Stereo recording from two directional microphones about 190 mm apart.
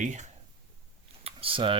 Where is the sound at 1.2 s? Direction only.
30° right (ahead or behind).